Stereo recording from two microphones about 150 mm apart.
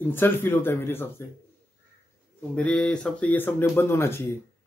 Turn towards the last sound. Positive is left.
turn(degrees=15)  # may be behind; listen again after turning